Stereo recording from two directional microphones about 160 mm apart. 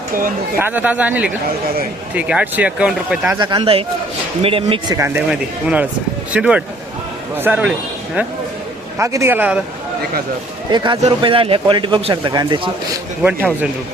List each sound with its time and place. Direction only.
0.6 s speech: 10° right (ahead or behind)
3.3 s speech: 30° right (ahead or behind)
4.9 s a man's voice: 15° right (ahead or behind)
9.0 s speech: 15° right (ahead or behind)
10.7 s speech: 25° right (ahead or behind)
13.2 s speech: 10° right (ahead or behind)